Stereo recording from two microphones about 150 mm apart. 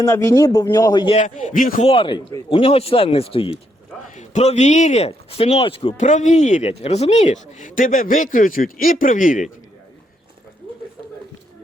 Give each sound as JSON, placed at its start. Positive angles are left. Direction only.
{"t": 0.0, "sound": "speech", "side_deg": 20}
{"t": 1.1, "sound": "speech", "side_deg": 55}
{"t": 1.8, "sound": "speech", "side_deg": 40}
{"t": 4.1, "sound": "speech", "side_deg": 55}
{"t": 6.1, "sound": "speech", "side_deg": 55}